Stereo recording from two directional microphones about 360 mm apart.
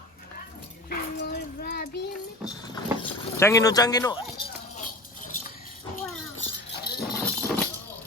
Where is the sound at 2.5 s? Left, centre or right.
Centre.